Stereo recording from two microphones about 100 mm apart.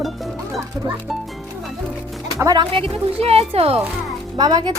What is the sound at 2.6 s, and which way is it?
A woman's voice, 60° right (ahead or behind).